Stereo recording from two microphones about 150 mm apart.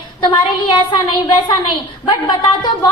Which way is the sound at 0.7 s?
30° left (ahead or behind).